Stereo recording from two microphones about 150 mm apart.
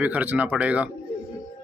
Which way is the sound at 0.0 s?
10° right (ahead or behind).